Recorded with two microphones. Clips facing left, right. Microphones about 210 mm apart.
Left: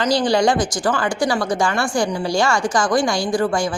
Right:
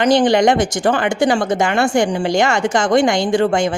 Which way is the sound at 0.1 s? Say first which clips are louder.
Right 4 dB; 20° right (ahead or behind).